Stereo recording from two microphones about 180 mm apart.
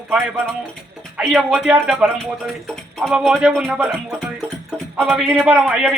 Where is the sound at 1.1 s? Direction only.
5° right (ahead or behind).